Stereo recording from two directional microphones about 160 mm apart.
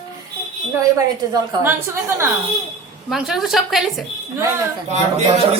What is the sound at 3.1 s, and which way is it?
A woman's voice, centre (ahead or behind).